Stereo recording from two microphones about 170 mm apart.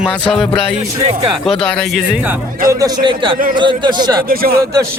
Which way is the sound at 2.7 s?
20° right (ahead or behind).